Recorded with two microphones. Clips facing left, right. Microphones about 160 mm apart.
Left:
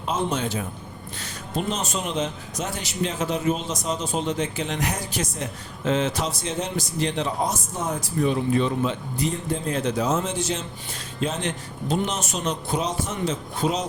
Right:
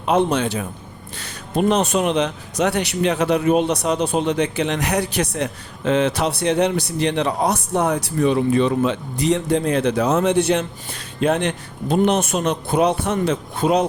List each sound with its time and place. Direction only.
0.0 s a man's voice: 65° right (ahead or behind)